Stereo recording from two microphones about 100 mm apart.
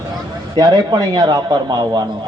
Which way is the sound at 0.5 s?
40° right (ahead or behind).